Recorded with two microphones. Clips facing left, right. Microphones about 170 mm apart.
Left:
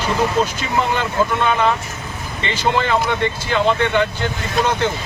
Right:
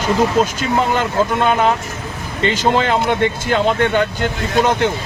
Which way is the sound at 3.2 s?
45° right (ahead or behind).